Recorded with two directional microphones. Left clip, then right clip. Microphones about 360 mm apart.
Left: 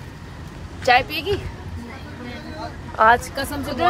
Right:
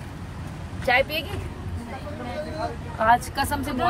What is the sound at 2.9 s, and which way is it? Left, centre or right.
Speech, left.